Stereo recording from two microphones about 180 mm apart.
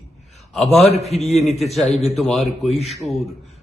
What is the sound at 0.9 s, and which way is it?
Speech, 35° left (ahead or behind).